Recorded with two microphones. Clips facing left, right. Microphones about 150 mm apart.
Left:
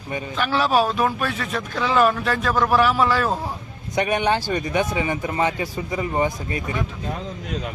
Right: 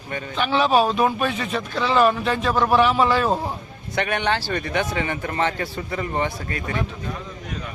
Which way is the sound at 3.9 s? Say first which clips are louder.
Left 2 dB; 15° left (ahead or behind).